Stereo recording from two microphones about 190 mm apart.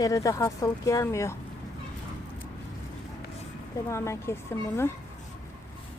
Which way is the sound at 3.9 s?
15° left (ahead or behind).